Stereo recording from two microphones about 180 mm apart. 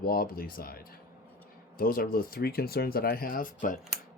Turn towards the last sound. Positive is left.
turn(degrees=50)  # may be behind; listen again after turning